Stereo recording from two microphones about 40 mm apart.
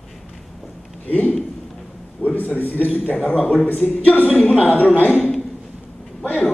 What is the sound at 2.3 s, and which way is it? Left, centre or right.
Speech, left.